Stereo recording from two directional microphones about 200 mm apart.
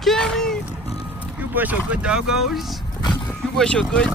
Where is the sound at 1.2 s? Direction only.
10° right (ahead or behind).